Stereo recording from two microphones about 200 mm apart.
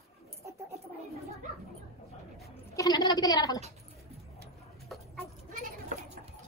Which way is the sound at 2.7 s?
20° left (ahead or behind).